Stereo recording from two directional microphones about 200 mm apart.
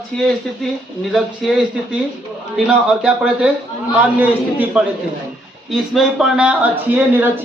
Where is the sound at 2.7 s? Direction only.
5° right (ahead or behind).